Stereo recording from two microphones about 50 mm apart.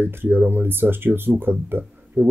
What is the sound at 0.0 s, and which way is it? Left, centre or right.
Speech, right.